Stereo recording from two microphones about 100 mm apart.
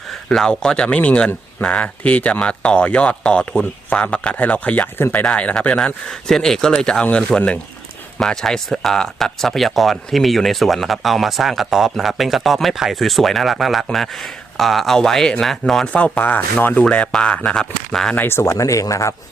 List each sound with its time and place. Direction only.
0.3 s speech: 5° left (ahead or behind)
18.1 s speech: 20° left (ahead or behind)